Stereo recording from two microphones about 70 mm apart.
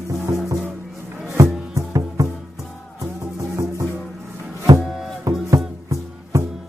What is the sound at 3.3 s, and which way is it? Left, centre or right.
Music, right.